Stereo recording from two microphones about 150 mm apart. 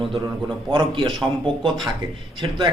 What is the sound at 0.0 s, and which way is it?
A man's voice, 35° right (ahead or behind).